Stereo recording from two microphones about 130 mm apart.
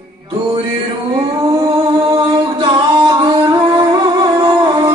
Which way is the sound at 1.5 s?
30° right (ahead or behind).